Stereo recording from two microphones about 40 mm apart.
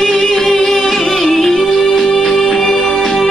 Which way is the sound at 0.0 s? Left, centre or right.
Centre.